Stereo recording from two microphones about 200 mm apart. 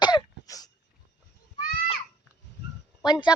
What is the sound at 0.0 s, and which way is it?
Throat clearing, 20° left (ahead or behind).